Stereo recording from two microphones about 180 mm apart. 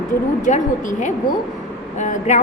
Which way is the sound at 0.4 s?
45° left (ahead or behind).